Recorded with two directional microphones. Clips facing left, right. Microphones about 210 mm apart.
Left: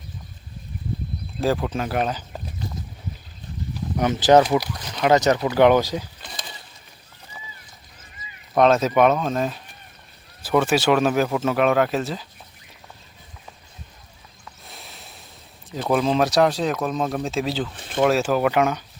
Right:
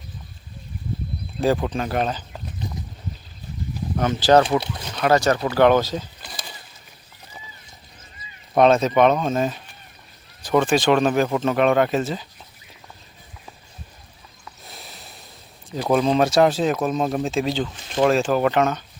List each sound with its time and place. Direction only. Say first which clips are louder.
1.4 s speech: right 2 dB; centre (ahead or behind)
3.9 s speech: left 1 dB; 15° left (ahead or behind)
4.4 s speech: even; 25° right (ahead or behind)
4.9 s speech: left 1 dB; 20° left (ahead or behind)
6.2 s a sound: even; 5° right (ahead or behind)
8.5 s speech: right 1 dB; centre (ahead or behind)
14.6 s snort: right 1 dB; centre (ahead or behind)
15.7 s speech: right 2 dB; centre (ahead or behind)